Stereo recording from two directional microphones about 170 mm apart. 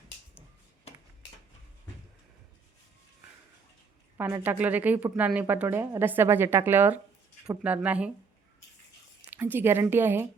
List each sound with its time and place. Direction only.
4.2 s speech: 10° right (ahead or behind)
9.3 s speech: 10° right (ahead or behind)